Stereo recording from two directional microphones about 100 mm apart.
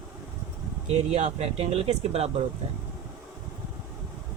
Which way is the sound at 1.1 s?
90° right.